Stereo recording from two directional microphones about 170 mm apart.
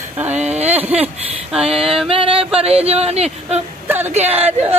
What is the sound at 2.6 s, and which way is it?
Speech, 35° right (ahead or behind).